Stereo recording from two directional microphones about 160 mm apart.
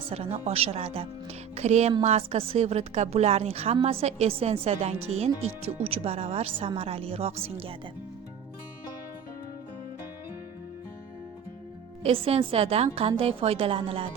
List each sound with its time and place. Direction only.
0.0 s a woman's voice: 40° right (ahead or behind)
12.0 s a woman's voice: 35° right (ahead or behind)